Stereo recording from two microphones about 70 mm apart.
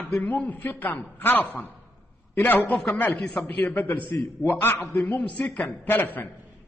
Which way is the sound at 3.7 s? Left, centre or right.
Left.